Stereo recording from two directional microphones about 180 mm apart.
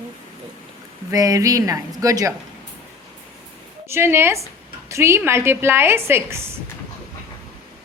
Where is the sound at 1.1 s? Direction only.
20° right (ahead or behind).